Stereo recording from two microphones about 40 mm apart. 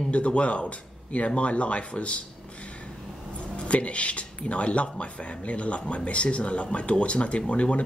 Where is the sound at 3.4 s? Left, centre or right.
Left.